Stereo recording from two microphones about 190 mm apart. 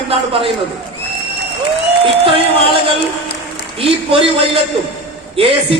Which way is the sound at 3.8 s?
30° right (ahead or behind).